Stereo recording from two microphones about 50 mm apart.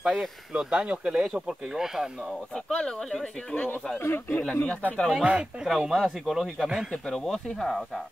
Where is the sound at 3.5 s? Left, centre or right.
Left.